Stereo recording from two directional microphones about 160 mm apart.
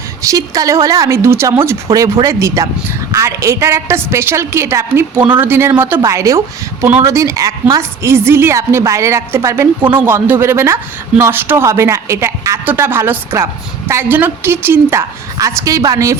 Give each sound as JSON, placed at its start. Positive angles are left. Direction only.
{"t": 0.2, "sound": "a woman's voice", "side_deg": -20}